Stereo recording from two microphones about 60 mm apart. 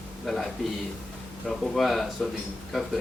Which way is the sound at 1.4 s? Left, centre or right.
Centre.